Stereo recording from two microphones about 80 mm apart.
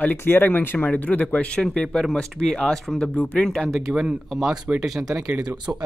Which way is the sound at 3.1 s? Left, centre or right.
Left.